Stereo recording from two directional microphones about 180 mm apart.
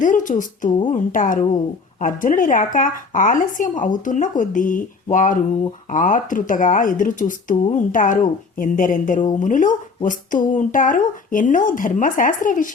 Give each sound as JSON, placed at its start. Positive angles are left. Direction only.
{"t": 0.0, "sound": "speech", "side_deg": 45}